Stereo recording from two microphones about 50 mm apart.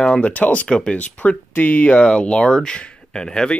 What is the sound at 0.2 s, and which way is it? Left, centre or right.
Speech, left.